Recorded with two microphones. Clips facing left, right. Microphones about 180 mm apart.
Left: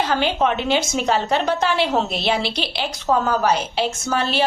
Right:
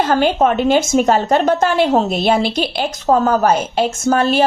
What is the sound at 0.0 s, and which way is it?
A woman's voice, 50° right (ahead or behind).